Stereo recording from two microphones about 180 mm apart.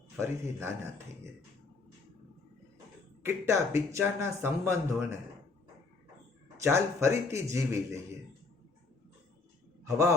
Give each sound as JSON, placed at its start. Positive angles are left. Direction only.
{"t": 0.2, "sound": "speech", "side_deg": -15}
{"t": 3.2, "sound": "speech", "side_deg": -15}
{"t": 6.6, "sound": "speech", "side_deg": -15}
{"t": 9.8, "sound": "a man's voice", "side_deg": -15}